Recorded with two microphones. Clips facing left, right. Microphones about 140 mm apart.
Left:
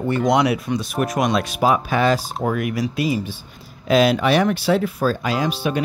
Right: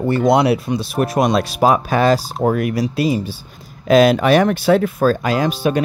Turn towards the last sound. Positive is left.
turn(degrees=-45)  # may be behind; listen again after turning